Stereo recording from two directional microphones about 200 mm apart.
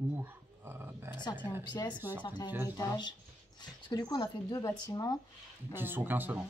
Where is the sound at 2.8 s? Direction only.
20° left (ahead or behind).